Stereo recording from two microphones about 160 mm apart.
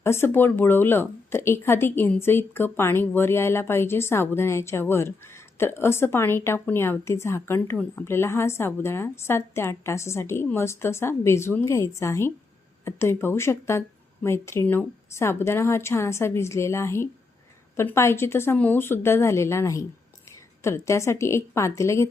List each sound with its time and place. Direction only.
0.0 s a woman's voice: 15° left (ahead or behind)